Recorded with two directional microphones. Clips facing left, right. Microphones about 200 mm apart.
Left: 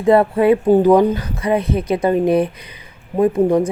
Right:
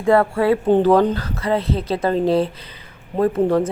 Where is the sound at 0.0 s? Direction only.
20° left (ahead or behind).